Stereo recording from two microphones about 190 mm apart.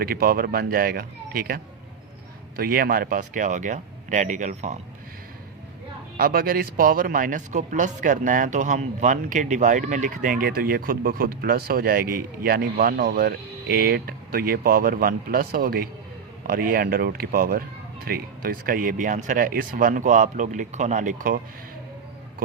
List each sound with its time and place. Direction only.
0.0 s speech: 50° right (ahead or behind)
6.1 s speech: 50° right (ahead or behind)